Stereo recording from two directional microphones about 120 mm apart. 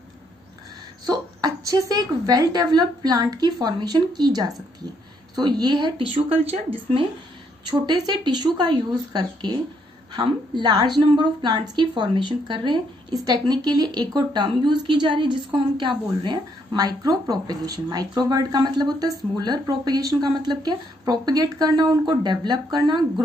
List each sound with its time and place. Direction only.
1.0 s a woman's voice: 30° right (ahead or behind); by 7.1 s 50° right (ahead or behind)
7.8 s a woman's voice: 35° right (ahead or behind)